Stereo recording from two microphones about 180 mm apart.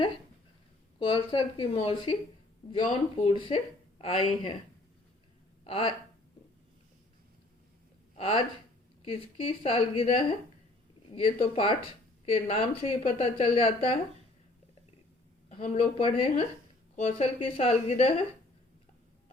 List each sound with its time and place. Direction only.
0.9 s speech: 25° left (ahead or behind)
5.6 s speech: 30° left (ahead or behind)
8.1 s a woman's voice: 30° left (ahead or behind)
15.4 s a woman's voice: 35° left (ahead or behind)